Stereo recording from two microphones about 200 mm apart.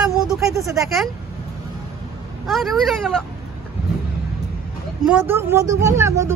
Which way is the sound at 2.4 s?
Centre (ahead or behind).